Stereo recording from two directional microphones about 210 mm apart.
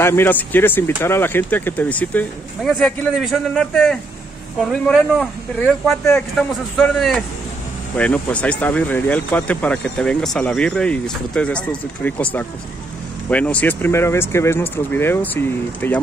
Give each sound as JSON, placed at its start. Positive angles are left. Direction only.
{"t": 0.0, "sound": "speech", "side_deg": 10}
{"t": 13.3, "sound": "speech", "side_deg": 5}